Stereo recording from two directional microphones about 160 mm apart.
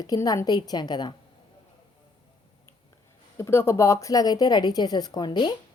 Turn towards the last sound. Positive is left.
turn(degrees=25)  # may be behind; listen again after turning